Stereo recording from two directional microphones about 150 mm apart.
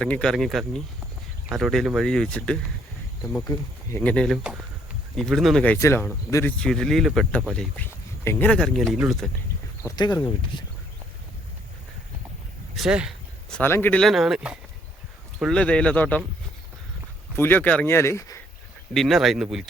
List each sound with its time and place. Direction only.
0.0 s speech: 5° left (ahead or behind)
6.6 s speech: 5° left (ahead or behind)
7.9 s speech: 15° left (ahead or behind); by 9.3 s centre (ahead or behind)
9.8 s speech: 25° left (ahead or behind)
12.7 s speech: 5° right (ahead or behind)
13.5 s speech: 15° left (ahead or behind)
14.0 s speech: centre (ahead or behind)
17.3 s speech: 15° left (ahead or behind)
18.9 s speech: centre (ahead or behind)